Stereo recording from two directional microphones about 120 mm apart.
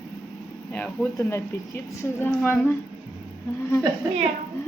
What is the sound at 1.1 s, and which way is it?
A woman's voice, 25° left (ahead or behind).